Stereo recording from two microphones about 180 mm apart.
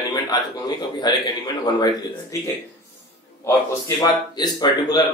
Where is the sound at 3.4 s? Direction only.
20° left (ahead or behind).